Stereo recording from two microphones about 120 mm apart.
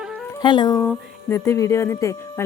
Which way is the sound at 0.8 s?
25° left (ahead or behind).